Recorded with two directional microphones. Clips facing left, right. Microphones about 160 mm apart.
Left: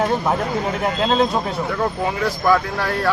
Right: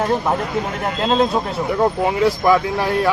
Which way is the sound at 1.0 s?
Centre (ahead or behind).